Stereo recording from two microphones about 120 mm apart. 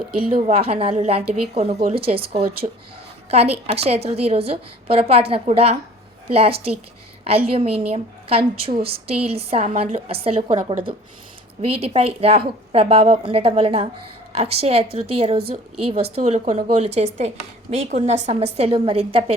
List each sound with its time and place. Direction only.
0.2 s a woman's voice: 55° right (ahead or behind)